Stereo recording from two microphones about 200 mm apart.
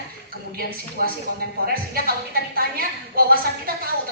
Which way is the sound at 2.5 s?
50° right (ahead or behind).